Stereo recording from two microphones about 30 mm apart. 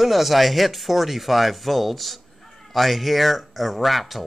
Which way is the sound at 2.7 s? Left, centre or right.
Centre.